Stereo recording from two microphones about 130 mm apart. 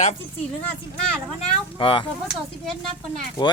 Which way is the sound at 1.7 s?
40° left (ahead or behind).